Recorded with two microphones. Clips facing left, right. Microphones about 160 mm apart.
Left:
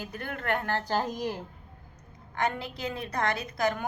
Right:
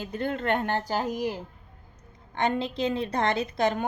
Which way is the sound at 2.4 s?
25° right (ahead or behind).